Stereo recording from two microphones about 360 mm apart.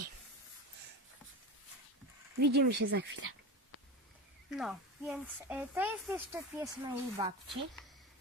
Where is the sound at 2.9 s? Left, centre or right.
Right.